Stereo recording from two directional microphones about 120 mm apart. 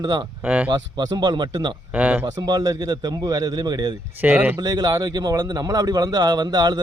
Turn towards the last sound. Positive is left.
turn(degrees=-35)  # may be behind; listen again after turning